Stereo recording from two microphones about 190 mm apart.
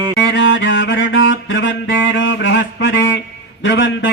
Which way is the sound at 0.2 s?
70° left (ahead or behind).